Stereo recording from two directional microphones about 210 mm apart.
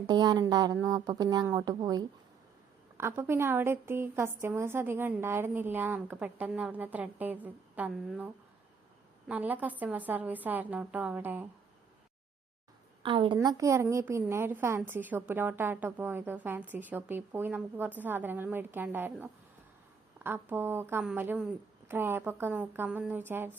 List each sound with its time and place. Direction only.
0.1 s a woman's voice: 20° right (ahead or behind)
9.3 s a woman's voice: 5° right (ahead or behind)
13.0 s a woman's voice: 25° right (ahead or behind); by 23.6 s 10° right (ahead or behind)